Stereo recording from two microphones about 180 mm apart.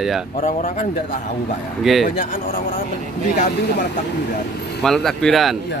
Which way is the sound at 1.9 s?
Centre (ahead or behind).